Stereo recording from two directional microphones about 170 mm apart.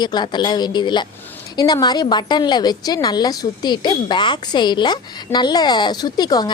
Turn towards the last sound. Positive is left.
turn(degrees=25)  # may be behind; listen again after turning